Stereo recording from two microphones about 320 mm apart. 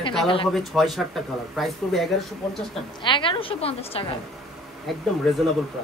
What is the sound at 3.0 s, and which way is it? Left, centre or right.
A woman's voice, centre.